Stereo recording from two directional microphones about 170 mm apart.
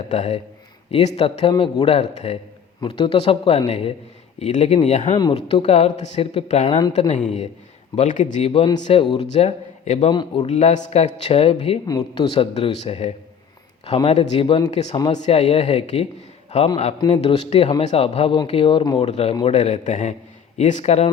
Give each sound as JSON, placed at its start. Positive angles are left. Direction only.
{"t": 0.1, "sound": "speech", "side_deg": 40}
{"t": 7.9, "sound": "speech", "side_deg": 45}
{"t": 10.1, "sound": "speech", "side_deg": 25}
{"t": 10.4, "sound": "speech", "side_deg": 40}
{"t": 11.9, "sound": "speech", "side_deg": 25}
{"t": 12.3, "sound": "speech", "side_deg": 35}
{"t": 19.5, "sound": "speech", "side_deg": 45}